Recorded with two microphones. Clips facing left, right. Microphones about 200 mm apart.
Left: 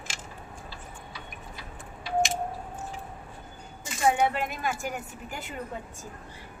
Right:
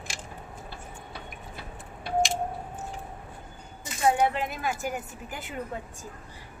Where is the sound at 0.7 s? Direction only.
55° right (ahead or behind).